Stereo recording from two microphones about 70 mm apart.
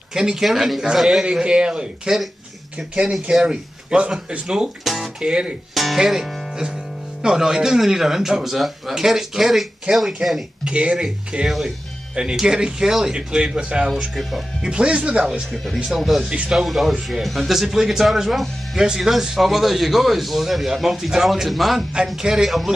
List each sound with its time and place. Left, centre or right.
0.1 s a man's voice: centre
5.8 s a man's voice: centre
10.6 s speech: centre
11.4 s a man's voice: centre
14.7 s speech: centre
15.5 s a man's voice: centre
16.3 s speech: centre
16.6 s a man's voice: centre